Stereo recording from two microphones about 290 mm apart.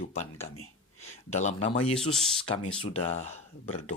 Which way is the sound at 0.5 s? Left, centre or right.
Left.